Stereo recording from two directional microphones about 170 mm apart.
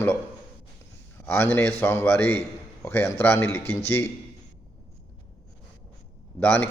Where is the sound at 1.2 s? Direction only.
15° left (ahead or behind).